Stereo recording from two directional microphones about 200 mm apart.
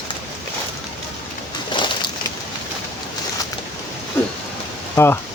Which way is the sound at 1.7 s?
25° left (ahead or behind).